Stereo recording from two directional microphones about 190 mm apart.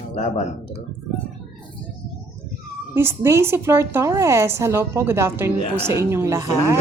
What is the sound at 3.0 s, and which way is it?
A woman's voice, 15° right (ahead or behind).